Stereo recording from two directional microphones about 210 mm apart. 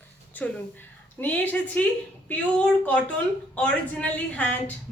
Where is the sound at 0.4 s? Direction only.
5° left (ahead or behind).